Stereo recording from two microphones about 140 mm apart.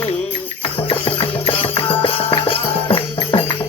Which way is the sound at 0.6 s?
40° left (ahead or behind).